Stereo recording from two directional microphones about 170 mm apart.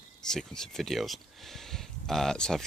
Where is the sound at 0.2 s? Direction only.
5° left (ahead or behind).